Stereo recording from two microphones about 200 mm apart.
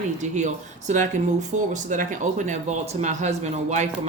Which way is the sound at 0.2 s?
35° right (ahead or behind).